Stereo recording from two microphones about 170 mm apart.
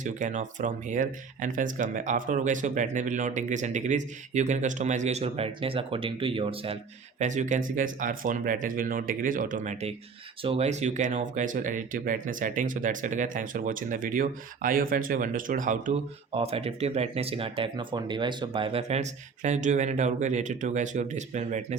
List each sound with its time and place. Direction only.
0.0 s speech: 45° right (ahead or behind)
7.2 s speech: 45° right (ahead or behind)
10.4 s speech: 35° right (ahead or behind)
16.3 s speech: 35° right (ahead or behind)